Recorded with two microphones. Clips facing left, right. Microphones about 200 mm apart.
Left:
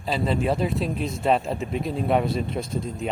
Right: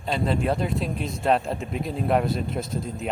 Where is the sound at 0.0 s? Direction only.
Centre (ahead or behind).